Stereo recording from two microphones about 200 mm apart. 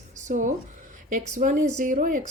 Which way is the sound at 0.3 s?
40° right (ahead or behind).